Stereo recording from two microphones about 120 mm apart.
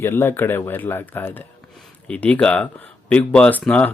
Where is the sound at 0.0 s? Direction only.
20° left (ahead or behind).